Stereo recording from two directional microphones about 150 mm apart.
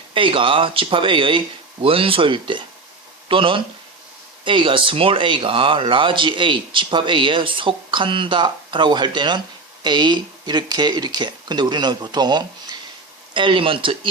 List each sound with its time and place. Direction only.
0.1 s speech: 35° right (ahead or behind)